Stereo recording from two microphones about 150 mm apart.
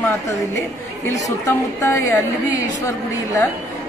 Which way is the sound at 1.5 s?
20° left (ahead or behind).